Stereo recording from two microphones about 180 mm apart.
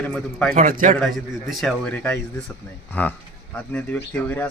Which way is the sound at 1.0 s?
Centre (ahead or behind).